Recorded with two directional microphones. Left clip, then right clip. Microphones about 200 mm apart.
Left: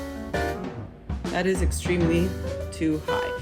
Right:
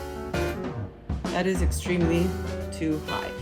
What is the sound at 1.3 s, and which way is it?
Speech, 45° right (ahead or behind).